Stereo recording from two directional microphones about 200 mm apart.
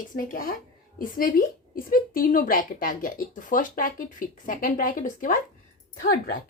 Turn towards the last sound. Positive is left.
turn(degrees=45)  # may be behind; listen again after turning